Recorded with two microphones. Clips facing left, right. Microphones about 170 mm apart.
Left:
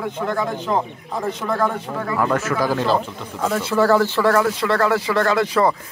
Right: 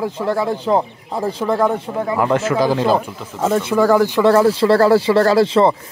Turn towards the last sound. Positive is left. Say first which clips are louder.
# right 5 dB
turn(degrees=-30)  # may be behind; listen again after turning